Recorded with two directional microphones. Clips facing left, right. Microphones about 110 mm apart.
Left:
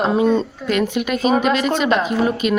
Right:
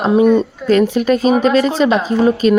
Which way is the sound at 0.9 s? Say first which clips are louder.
Right 5 dB; 35° right (ahead or behind).